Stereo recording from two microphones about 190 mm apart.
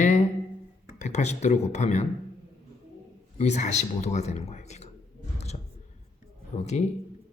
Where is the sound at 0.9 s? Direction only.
35° left (ahead or behind).